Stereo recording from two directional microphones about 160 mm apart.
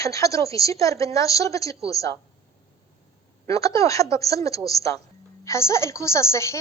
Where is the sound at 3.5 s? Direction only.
20° left (ahead or behind).